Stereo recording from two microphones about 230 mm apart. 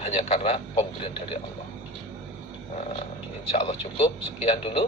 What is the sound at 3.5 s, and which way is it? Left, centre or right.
A man's voice, left.